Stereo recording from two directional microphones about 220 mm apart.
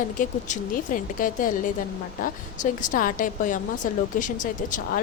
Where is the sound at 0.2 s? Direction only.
35° left (ahead or behind).